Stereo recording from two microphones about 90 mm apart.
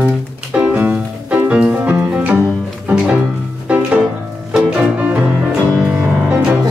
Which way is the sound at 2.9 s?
15° right (ahead or behind).